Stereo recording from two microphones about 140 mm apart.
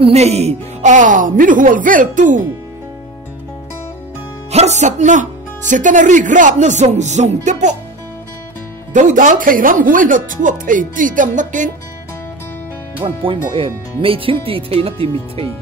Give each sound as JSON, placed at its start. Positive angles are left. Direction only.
{"t": 0.0, "sound": "speech", "side_deg": -50}
{"t": 4.5, "sound": "speech", "side_deg": -50}
{"t": 8.9, "sound": "speech", "side_deg": -65}
{"t": 13.0, "sound": "speech", "side_deg": -35}